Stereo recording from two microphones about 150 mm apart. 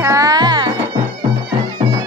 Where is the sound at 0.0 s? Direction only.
20° right (ahead or behind).